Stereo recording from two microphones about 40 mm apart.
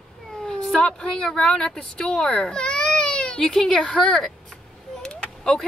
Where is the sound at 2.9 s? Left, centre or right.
Centre.